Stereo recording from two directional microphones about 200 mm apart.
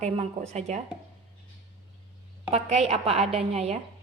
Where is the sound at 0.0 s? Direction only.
35° right (ahead or behind).